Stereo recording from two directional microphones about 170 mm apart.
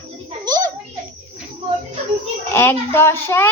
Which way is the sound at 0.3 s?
25° right (ahead or behind).